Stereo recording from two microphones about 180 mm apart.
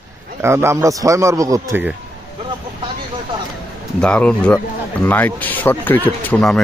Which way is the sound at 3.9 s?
5° left (ahead or behind).